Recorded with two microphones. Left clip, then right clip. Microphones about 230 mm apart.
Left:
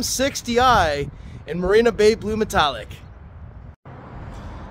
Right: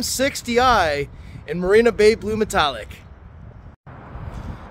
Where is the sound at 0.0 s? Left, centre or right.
Centre.